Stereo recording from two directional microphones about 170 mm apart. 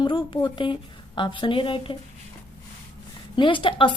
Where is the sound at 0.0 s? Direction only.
30° left (ahead or behind).